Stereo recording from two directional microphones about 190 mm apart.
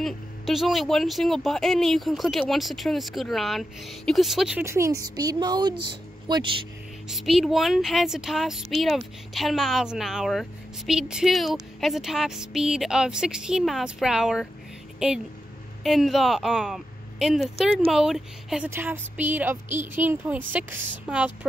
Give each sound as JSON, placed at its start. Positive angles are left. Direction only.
{"t": 0.0, "sound": "speech", "side_deg": 0}
{"t": 7.1, "sound": "a woman's voice", "side_deg": 0}